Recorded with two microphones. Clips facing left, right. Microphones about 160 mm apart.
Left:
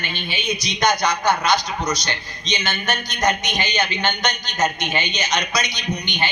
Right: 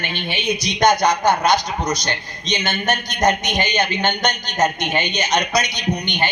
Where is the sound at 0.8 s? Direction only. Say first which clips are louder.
Right 4 dB; 50° right (ahead or behind).